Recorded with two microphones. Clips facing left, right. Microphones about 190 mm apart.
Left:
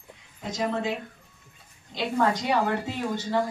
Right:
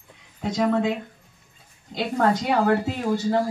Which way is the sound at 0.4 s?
60° right (ahead or behind).